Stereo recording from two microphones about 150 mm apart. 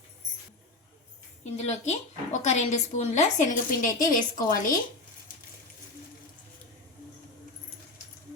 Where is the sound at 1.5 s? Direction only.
50° left (ahead or behind); by 4.8 s 65° left (ahead or behind).